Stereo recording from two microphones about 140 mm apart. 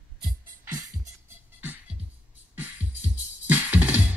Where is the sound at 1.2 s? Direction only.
15° right (ahead or behind).